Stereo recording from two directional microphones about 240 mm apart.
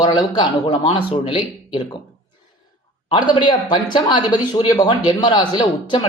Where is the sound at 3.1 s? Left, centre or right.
Centre.